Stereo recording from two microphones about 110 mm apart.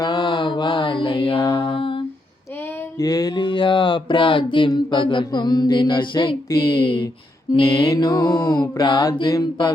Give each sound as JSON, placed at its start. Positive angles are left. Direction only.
{"t": 0.0, "sound": "mantra", "side_deg": 45}
{"t": 1.4, "sound": "mantra", "side_deg": 30}
{"t": 1.7, "sound": "humming", "side_deg": 50}
{"t": 3.0, "sound": "a sound", "side_deg": 35}
{"t": 7.9, "sound": "a sound", "side_deg": 40}
{"t": 9.3, "sound": "mantra", "side_deg": 40}